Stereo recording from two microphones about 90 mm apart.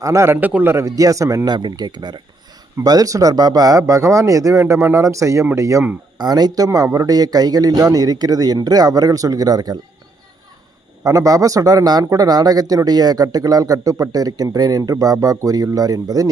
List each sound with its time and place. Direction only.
0.0 s speech: 35° right (ahead or behind)
0.3 s a man's voice: 20° right (ahead or behind)
0.9 s speech: 40° right (ahead or behind)
1.5 s speech: 55° right (ahead or behind)
4.6 s speech: 25° right (ahead or behind)
6.1 s speech: 50° right (ahead or behind)
6.7 s speech: 35° right (ahead or behind)
11.0 s speech: 40° right (ahead or behind)